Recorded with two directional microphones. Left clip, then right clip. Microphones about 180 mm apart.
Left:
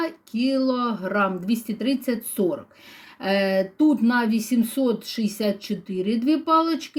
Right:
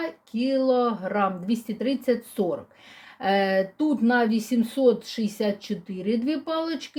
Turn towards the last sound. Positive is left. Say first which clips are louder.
# left 8 dB
turn(degrees=-10)  # may be behind; listen again after turning